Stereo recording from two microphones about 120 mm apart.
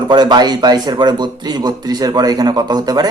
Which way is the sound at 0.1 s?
35° right (ahead or behind).